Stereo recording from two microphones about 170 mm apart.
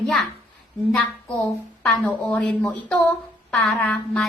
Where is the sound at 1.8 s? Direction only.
5° left (ahead or behind).